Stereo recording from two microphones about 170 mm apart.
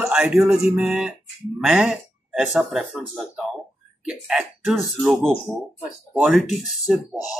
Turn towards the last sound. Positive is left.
turn(degrees=-5)  # may be behind; listen again after turning